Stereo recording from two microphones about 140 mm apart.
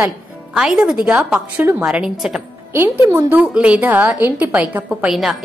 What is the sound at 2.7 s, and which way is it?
A woman's voice, 15° right (ahead or behind).